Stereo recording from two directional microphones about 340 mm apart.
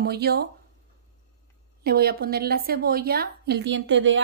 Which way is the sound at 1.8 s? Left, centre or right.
Right.